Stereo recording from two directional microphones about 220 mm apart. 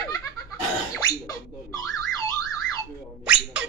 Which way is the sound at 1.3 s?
15° left (ahead or behind).